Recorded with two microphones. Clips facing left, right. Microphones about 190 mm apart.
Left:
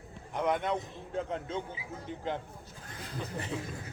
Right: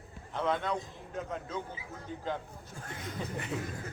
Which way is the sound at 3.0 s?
30° left (ahead or behind).